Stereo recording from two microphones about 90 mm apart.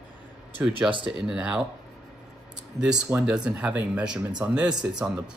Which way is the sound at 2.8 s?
10° right (ahead or behind).